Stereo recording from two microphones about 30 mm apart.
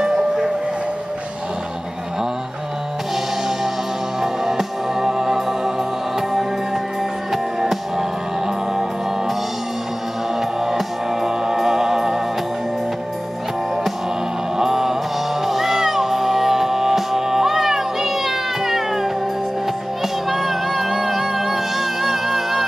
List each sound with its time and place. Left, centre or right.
0.0 s music: right
4.2 s music: centre
10.6 s music: centre
14.6 s a sound: centre
15.4 s music: centre
20.0 s music: centre
20.9 s music: centre